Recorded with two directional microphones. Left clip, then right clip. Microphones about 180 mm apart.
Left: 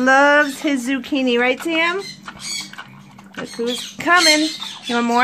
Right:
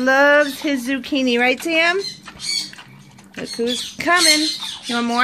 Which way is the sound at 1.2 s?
10° right (ahead or behind).